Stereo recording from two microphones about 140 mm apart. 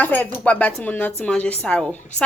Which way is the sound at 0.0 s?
15° left (ahead or behind).